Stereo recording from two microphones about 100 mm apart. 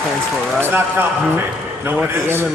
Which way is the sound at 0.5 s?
20° right (ahead or behind).